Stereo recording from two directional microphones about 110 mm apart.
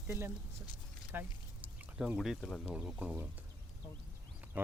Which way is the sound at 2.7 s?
10° right (ahead or behind).